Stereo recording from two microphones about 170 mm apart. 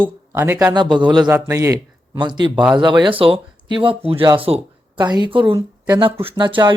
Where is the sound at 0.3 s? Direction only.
10° right (ahead or behind).